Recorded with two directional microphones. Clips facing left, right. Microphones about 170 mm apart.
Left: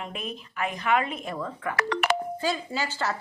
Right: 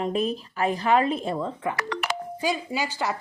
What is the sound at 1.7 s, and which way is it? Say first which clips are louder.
Speech: left 4 dB; 65° left (ahead or behind).